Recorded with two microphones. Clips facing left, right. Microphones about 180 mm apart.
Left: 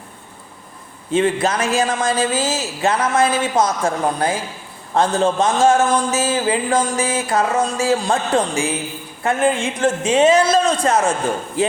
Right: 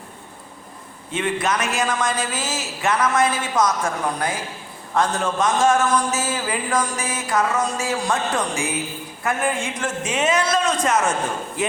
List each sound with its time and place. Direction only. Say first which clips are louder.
1.1 s a man's voice: left 6 dB; 30° left (ahead or behind)